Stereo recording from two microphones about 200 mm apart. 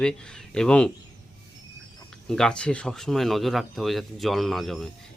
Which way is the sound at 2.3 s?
5° left (ahead or behind).